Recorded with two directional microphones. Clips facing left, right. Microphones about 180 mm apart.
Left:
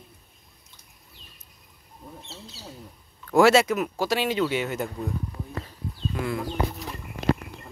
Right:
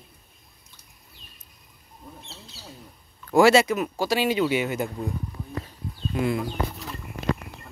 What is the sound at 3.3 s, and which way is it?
Speech, centre (ahead or behind).